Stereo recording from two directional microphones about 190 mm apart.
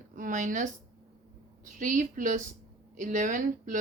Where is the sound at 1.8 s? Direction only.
45° right (ahead or behind).